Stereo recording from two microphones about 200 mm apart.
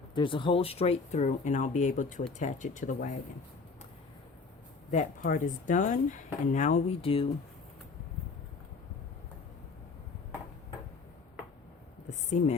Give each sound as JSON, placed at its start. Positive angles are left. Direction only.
{"t": 0.1, "sound": "speech", "side_deg": 25}
{"t": 4.9, "sound": "speech", "side_deg": 40}
{"t": 12.0, "sound": "a sound", "side_deg": 35}